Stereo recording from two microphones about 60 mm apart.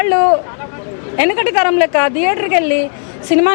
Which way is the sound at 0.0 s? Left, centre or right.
Left.